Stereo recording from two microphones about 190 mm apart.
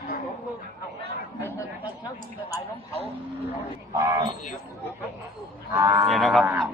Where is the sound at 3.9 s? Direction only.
20° right (ahead or behind).